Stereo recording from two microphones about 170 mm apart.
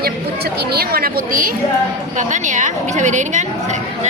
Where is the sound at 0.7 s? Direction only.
60° right (ahead or behind).